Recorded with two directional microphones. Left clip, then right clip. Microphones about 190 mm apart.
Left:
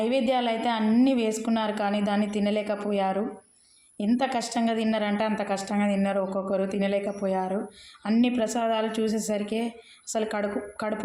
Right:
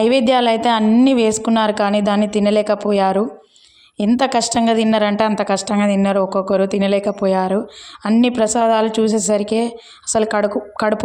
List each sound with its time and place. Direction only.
0.0 s a woman's voice: 50° right (ahead or behind)